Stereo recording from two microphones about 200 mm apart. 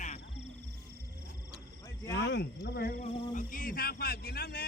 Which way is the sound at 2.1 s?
55° left (ahead or behind).